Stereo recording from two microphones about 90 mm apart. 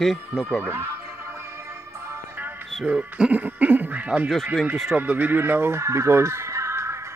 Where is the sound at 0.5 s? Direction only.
25° right (ahead or behind).